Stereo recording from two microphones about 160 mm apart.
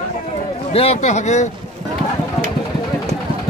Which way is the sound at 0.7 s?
40° left (ahead or behind).